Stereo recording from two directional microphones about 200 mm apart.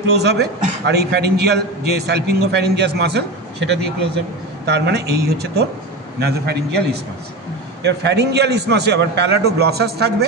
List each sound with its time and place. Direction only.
0.1 s a man's voice: 55° right (ahead or behind)
7.8 s a man's voice: 60° right (ahead or behind)